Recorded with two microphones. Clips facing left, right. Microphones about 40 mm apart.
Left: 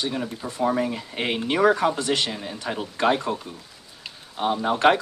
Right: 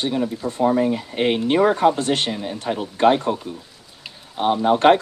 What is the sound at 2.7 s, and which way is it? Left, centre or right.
Speech, centre.